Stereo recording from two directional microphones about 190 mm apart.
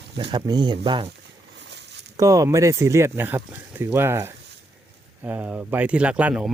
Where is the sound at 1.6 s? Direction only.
65° right (ahead or behind).